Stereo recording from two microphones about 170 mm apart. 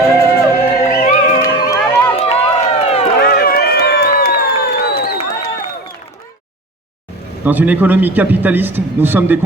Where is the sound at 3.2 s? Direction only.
65° left (ahead or behind).